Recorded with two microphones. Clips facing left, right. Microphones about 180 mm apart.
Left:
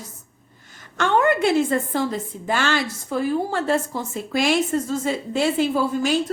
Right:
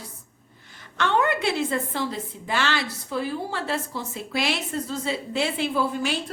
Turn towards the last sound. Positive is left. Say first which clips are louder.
# left 5 dB
turn(degrees=40)  # may be behind; listen again after turning